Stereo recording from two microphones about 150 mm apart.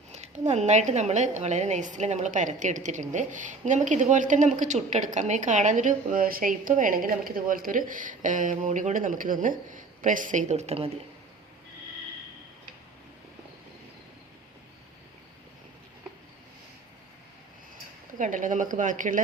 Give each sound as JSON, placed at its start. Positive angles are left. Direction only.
{"t": 0.1, "sound": "a woman's voice", "side_deg": -50}
{"t": 18.2, "sound": "a woman's voice", "side_deg": -60}